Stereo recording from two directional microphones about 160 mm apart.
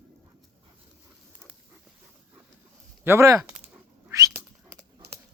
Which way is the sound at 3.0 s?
15° right (ahead or behind).